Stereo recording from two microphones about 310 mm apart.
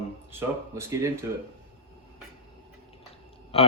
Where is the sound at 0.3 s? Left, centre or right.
Centre.